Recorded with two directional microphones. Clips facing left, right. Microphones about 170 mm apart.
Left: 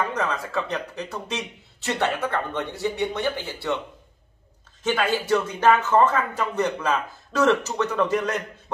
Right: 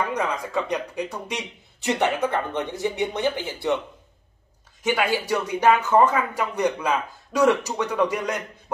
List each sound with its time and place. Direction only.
0.0 s speech: 15° right (ahead or behind)
4.8 s speech: 10° right (ahead or behind)